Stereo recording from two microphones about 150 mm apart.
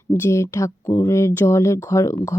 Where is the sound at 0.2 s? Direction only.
20° left (ahead or behind).